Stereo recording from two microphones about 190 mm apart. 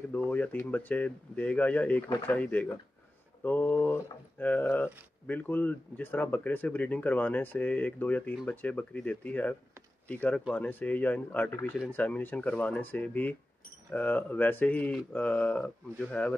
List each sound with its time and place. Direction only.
0.1 s speech: 10° left (ahead or behind)
2.0 s speech: 20° left (ahead or behind)
2.3 s speech: 10° left (ahead or behind)